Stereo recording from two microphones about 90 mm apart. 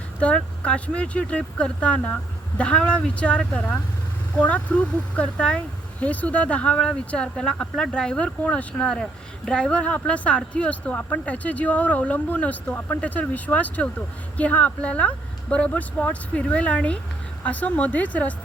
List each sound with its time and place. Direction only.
0.2 s speech: 15° left (ahead or behind)